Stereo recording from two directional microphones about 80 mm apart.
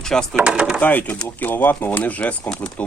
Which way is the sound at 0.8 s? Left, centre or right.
Centre.